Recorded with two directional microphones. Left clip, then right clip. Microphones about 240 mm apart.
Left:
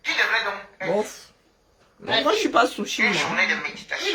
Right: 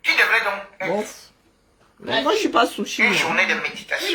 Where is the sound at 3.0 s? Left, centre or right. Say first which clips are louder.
Right 3 dB; right.